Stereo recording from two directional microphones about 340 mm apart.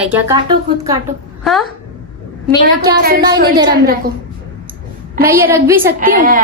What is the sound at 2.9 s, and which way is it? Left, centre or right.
Speech, right.